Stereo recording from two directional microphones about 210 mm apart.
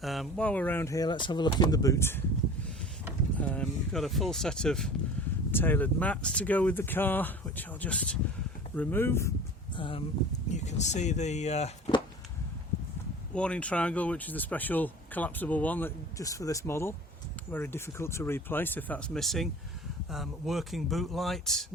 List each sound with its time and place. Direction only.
0.0 s speech: centre (ahead or behind)
3.3 s speech: 5° left (ahead or behind)
9.7 s speech: 25° left (ahead or behind)
13.3 s speech: 5° left (ahead or behind)